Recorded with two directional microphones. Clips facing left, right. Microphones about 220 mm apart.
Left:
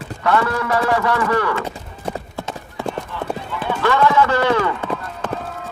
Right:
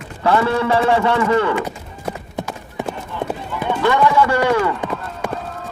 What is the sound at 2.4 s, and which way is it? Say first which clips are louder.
Clip-clop: right 1 dB; 20° right (ahead or behind).